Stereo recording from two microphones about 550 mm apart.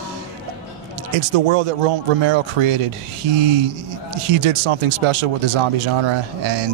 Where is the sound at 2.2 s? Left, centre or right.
Right.